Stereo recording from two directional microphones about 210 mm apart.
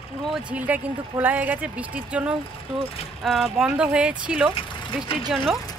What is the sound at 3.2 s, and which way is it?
Speech, centre (ahead or behind).